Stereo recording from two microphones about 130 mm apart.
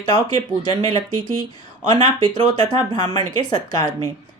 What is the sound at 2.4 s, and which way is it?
A woman's voice, 30° left (ahead or behind).